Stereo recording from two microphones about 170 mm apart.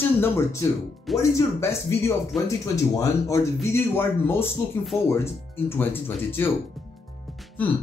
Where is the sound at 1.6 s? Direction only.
15° left (ahead or behind).